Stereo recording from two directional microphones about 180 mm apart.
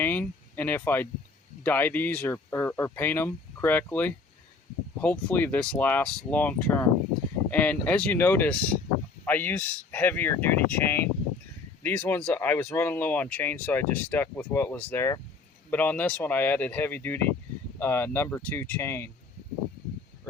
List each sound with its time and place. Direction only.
0.0 s speech: 10° left (ahead or behind)